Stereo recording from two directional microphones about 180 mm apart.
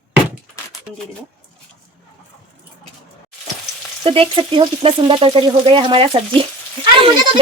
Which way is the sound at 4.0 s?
30° right (ahead or behind).